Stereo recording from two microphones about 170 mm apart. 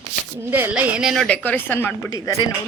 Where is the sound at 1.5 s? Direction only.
10° left (ahead or behind).